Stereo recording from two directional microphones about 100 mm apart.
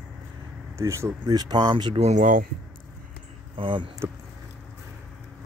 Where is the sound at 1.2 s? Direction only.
45° right (ahead or behind).